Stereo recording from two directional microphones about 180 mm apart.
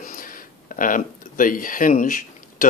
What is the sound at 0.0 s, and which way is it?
Speech, 50° left (ahead or behind).